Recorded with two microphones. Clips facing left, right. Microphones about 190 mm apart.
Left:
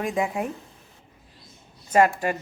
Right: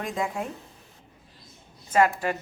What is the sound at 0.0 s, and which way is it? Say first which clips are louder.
Speech: left 4 dB; 15° left (ahead or behind).